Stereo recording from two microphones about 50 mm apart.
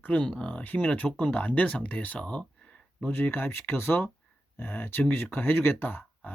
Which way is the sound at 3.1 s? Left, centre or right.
Left.